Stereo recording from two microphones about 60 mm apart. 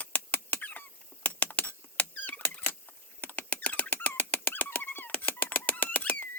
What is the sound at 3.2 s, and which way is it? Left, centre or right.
Rodents, left.